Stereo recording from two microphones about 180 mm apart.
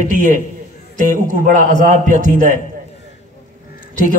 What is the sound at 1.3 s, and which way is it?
A man's voice, 45° right (ahead or behind).